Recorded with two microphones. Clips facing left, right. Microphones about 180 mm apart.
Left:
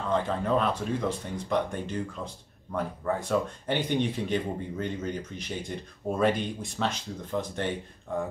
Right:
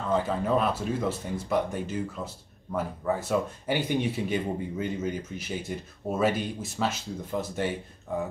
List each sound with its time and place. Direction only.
0.1 s speech: 5° right (ahead or behind)